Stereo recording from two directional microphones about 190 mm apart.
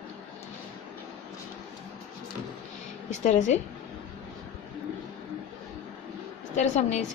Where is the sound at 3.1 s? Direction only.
40° left (ahead or behind).